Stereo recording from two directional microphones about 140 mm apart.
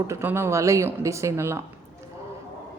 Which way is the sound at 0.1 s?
15° right (ahead or behind).